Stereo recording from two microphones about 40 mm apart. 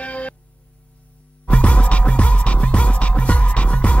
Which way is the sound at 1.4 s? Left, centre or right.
Left.